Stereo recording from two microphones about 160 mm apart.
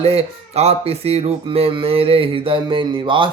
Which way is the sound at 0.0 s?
40° right (ahead or behind).